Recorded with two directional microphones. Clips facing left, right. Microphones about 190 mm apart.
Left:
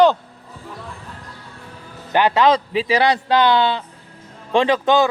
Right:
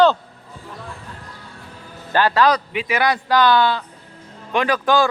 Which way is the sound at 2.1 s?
20° left (ahead or behind).